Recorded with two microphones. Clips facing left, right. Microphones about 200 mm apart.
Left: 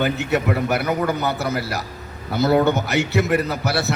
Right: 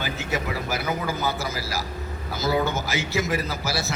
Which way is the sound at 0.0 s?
65° left (ahead or behind).